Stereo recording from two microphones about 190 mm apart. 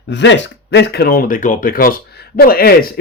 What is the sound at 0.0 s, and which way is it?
Speech, 70° left (ahead or behind).